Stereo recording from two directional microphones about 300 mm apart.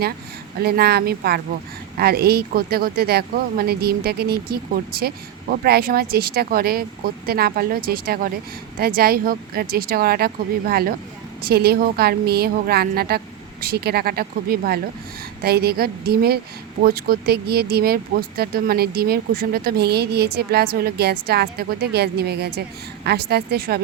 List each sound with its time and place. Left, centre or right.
0.6 s speech: right